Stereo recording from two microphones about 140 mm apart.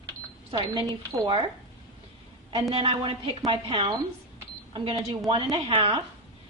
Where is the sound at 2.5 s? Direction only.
40° right (ahead or behind).